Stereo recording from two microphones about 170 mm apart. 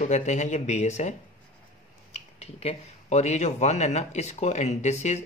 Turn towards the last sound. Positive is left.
turn(degrees=40)  # may be behind; listen again after turning